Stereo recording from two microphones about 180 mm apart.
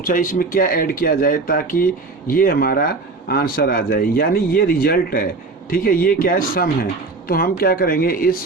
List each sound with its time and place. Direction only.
0.0 s speech: 50° left (ahead or behind)